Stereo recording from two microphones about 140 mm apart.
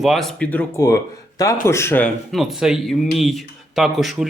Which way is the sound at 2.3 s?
Centre (ahead or behind).